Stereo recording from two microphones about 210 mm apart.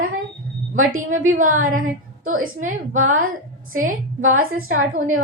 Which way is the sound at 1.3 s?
40° right (ahead or behind).